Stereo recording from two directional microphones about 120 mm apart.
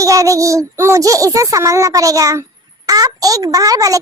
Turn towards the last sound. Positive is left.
turn(degrees=-30)  # may be behind; listen again after turning